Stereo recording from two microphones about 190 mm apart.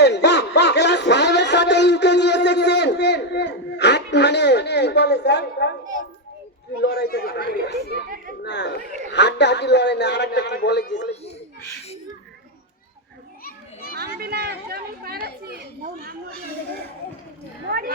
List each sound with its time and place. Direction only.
0.0 s a sound: 65° left (ahead or behind)
6.8 s a man's voice: 55° left (ahead or behind)
14.2 s speech: 55° right (ahead or behind)
17.7 s speech: 50° right (ahead or behind)